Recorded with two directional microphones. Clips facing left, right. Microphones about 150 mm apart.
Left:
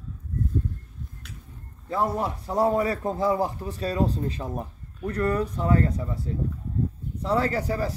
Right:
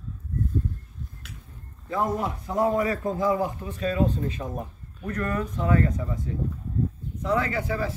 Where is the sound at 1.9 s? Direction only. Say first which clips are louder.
Left 1 dB; 35° left (ahead or behind).